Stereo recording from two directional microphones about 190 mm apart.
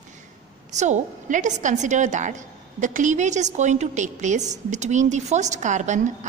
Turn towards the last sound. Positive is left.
turn(degrees=-40)  # may be behind; listen again after turning